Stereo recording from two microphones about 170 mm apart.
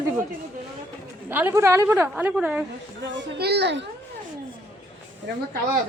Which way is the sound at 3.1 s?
80° right.